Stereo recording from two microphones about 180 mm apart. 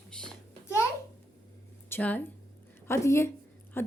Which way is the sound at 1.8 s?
10° left (ahead or behind).